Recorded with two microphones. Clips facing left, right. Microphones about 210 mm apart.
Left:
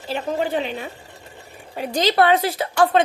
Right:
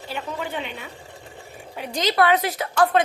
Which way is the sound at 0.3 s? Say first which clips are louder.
Left 7 dB; 40° left (ahead or behind).